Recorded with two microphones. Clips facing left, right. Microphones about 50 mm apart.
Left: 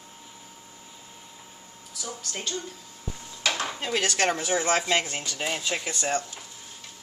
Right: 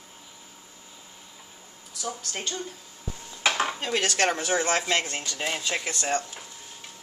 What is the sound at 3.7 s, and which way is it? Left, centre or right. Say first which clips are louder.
A man's voice: even; centre.